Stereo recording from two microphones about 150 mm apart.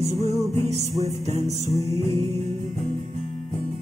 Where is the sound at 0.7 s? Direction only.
45° right (ahead or behind).